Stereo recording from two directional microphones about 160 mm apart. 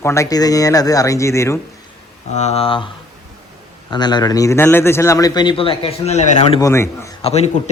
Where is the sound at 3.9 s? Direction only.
25° left (ahead or behind); by 6.6 s 45° left (ahead or behind).